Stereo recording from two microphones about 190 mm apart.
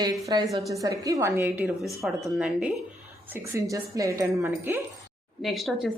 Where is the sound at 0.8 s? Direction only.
20° right (ahead or behind).